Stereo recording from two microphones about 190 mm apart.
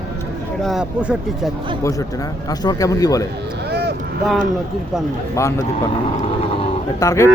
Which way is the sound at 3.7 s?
60° right (ahead or behind).